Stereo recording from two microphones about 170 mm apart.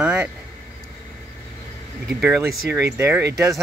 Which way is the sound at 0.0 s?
10° right (ahead or behind).